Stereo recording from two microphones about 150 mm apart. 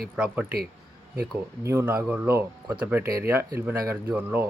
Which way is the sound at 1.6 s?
15° right (ahead or behind).